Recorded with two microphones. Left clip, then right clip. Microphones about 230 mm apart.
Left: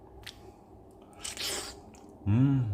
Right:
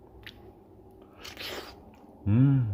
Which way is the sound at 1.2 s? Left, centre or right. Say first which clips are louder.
Left 2 dB; centre.